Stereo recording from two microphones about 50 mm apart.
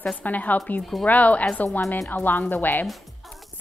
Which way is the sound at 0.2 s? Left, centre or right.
Left.